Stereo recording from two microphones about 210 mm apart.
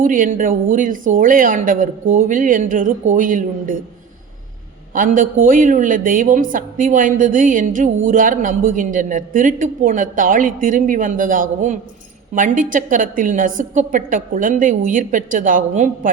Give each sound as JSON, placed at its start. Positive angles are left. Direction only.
{"t": 0.0, "sound": "a man's voice", "side_deg": -40}
{"t": 4.9, "sound": "a man's voice", "side_deg": -40}